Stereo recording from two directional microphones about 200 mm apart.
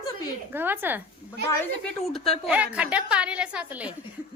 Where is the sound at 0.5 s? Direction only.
10° right (ahead or behind).